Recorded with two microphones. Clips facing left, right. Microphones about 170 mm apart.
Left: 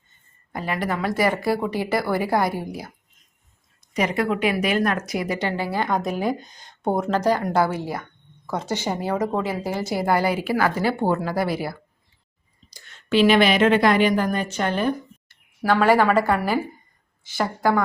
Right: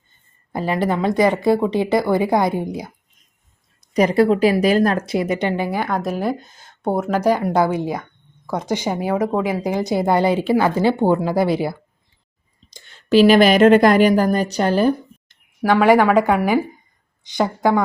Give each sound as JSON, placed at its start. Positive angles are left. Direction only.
{"t": 0.5, "sound": "a woman's voice", "side_deg": -30}
{"t": 3.8, "sound": "a woman's voice", "side_deg": -35}
{"t": 12.9, "sound": "speech", "side_deg": -35}
{"t": 15.3, "sound": "a woman's voice", "side_deg": -15}